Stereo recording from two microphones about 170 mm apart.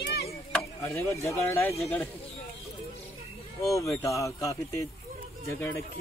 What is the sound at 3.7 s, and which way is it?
Speech, 20° left (ahead or behind).